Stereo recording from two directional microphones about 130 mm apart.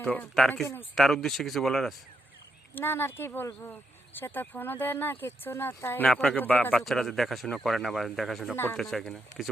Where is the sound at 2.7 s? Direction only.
15° left (ahead or behind).